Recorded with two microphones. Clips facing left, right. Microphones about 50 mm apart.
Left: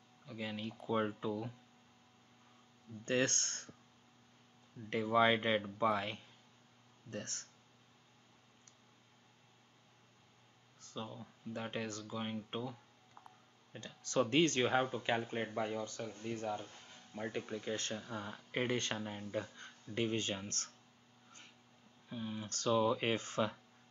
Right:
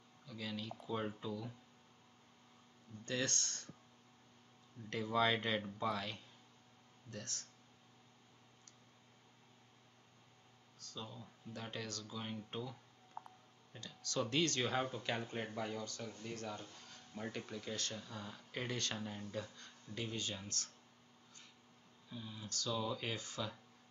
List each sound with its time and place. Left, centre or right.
0.3 s speech: left
3.1 s speech: left
4.8 s speech: left
10.8 s speech: left
13.2 s a sound: right
13.7 s speech: left
22.1 s speech: left